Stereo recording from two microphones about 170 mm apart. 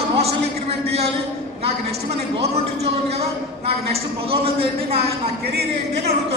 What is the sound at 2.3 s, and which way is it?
A man's voice, 35° right (ahead or behind).